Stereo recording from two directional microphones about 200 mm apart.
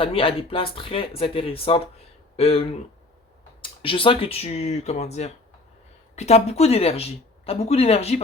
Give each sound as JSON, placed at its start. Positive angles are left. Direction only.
{"t": 0.0, "sound": "speech", "side_deg": 25}